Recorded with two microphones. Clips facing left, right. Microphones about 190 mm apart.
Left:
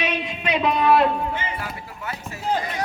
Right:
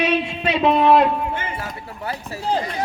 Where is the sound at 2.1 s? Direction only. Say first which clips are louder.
Right 2 dB; 35° right (ahead or behind).